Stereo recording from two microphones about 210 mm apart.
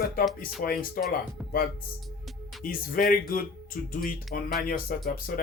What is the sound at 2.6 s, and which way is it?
Speech, 45° left (ahead or behind).